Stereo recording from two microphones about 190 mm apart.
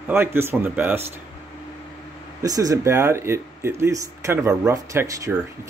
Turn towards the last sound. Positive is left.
turn(degrees=-15)  # may be behind; listen again after turning